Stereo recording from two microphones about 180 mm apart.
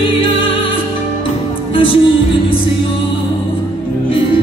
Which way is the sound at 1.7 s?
30° left (ahead or behind).